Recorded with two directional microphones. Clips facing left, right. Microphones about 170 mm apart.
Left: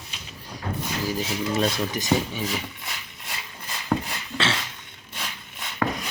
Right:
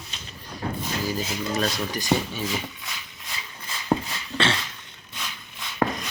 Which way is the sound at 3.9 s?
25° right (ahead or behind).